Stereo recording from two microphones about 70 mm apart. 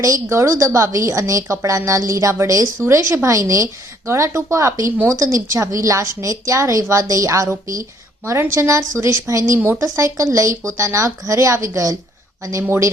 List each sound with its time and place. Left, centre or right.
0.0 s a woman's voice: right
12.6 s speech: right